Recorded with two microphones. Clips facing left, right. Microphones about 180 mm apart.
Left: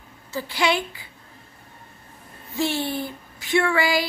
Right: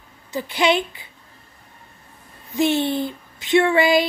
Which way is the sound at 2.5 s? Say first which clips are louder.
Right 6 dB; 20° right (ahead or behind).